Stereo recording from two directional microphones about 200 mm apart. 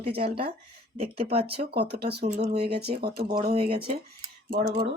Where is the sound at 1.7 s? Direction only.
55° right (ahead or behind).